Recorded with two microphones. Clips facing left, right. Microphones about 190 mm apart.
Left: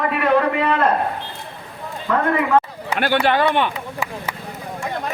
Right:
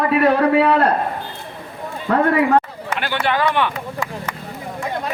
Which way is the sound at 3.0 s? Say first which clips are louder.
Left 5 dB; 50° left (ahead or behind).